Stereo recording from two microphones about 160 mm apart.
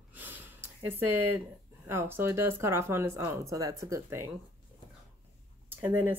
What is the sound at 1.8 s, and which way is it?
Speech, 15° right (ahead or behind).